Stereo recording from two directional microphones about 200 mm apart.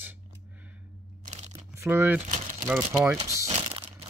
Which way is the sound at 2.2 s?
40° right (ahead or behind).